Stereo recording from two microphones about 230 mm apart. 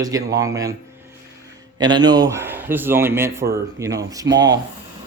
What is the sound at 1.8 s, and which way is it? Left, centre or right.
Speech, centre.